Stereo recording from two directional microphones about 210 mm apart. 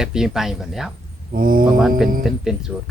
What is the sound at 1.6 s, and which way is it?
Speech, centre (ahead or behind).